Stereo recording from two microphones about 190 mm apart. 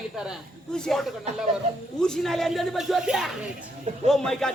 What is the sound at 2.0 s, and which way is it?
Speech, centre (ahead or behind).